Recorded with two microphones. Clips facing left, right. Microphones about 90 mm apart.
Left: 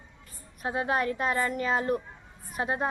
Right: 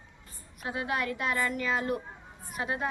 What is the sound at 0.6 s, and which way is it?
Speech, 35° left (ahead or behind).